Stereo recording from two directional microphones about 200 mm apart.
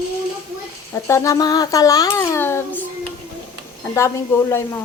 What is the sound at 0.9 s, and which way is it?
Speech, 15° left (ahead or behind).